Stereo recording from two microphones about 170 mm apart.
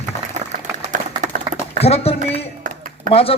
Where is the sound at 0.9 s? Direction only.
50° right (ahead or behind).